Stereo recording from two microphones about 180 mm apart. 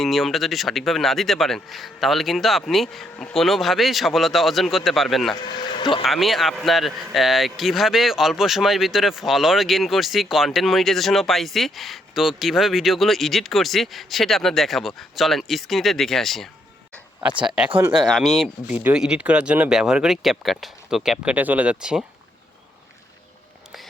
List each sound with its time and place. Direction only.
0.0 s speech: centre (ahead or behind)
5.3 s a sound: 25° left (ahead or behind)
6.0 s speech: centre (ahead or behind)